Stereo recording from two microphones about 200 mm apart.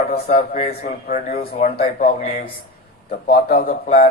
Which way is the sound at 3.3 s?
45° left (ahead or behind).